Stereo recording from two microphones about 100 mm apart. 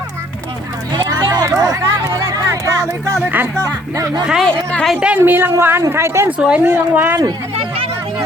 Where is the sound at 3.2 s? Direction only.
20° right (ahead or behind).